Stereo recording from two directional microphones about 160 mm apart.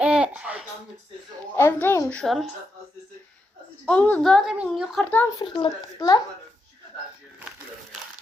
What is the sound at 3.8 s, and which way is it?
Speech, 10° left (ahead or behind).